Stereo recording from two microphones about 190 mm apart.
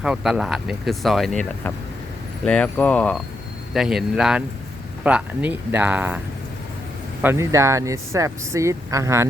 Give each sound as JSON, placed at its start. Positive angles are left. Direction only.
{"t": 0.0, "sound": "speech", "side_deg": -5}